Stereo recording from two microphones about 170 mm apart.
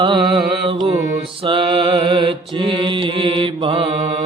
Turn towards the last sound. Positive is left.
turn(degrees=-30)  # may be behind; listen again after turning